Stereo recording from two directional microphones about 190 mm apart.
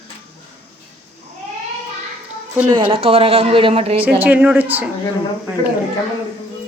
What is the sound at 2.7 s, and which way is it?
Speech, 30° right (ahead or behind).